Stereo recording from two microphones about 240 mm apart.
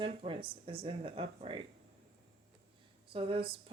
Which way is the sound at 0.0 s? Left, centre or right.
Right.